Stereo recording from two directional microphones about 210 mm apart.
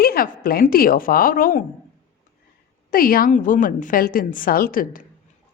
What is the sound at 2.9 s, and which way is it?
A woman's voice, 45° left (ahead or behind).